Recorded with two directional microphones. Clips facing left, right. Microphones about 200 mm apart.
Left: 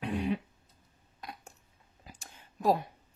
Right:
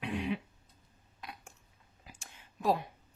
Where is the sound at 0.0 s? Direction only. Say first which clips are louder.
Left 3 dB; 40° left (ahead or behind).